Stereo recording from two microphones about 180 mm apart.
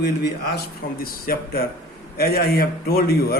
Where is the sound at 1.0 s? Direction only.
55° left (ahead or behind).